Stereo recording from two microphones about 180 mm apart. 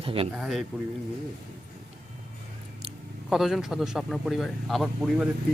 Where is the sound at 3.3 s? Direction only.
Centre (ahead or behind).